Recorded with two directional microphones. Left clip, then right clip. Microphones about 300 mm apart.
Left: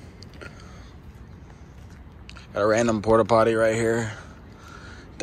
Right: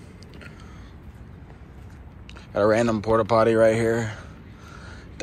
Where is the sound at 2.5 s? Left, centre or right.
Centre.